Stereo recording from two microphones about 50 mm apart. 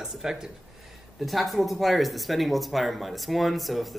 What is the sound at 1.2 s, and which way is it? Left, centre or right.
Speech, centre.